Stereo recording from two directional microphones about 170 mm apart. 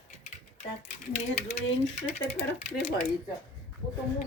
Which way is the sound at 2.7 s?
35° left (ahead or behind).